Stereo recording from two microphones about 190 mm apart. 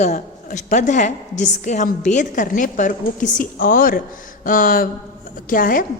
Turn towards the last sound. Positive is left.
turn(degrees=45)  # may be behind; listen again after turning